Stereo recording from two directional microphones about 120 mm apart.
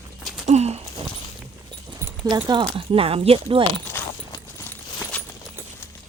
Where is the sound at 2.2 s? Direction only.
35° right (ahead or behind).